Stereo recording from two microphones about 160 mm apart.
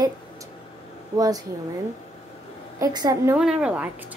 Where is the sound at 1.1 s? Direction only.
25° right (ahead or behind).